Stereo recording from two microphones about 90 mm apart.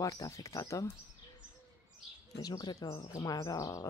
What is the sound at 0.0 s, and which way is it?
Speech, 35° left (ahead or behind).